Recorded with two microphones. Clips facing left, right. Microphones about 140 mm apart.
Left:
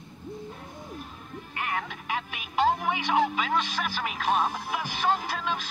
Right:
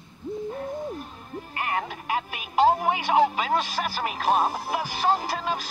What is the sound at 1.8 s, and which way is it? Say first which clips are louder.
Music: right 4 dB; 40° right (ahead or behind).